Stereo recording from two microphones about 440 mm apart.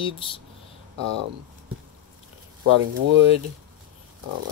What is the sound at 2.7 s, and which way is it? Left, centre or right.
Speech, right.